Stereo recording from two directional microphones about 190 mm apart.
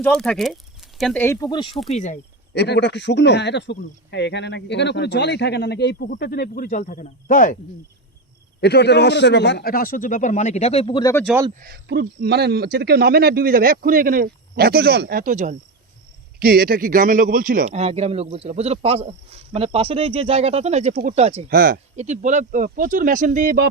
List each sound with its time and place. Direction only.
0.0 s speech: 5° left (ahead or behind)
1.2 s speech: 15° left (ahead or behind)
1.9 s speech: 40° left (ahead or behind)
2.5 s speech: 65° left (ahead or behind); by 7.6 s 45° left (ahead or behind)
8.6 s a man's voice: 60° left (ahead or behind); by 11.0 s 30° left (ahead or behind)
11.6 s a man's voice: 55° right (ahead or behind)
17.7 s speech: 35° right (ahead or behind)
21.5 s a man's voice: 45° right (ahead or behind)